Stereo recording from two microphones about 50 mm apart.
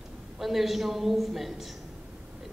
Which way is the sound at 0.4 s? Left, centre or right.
Centre.